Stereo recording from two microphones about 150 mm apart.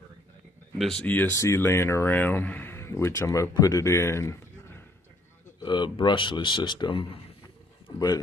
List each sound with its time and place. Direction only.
0.7 s speech: 5° left (ahead or behind)
5.6 s a man's voice: 30° left (ahead or behind)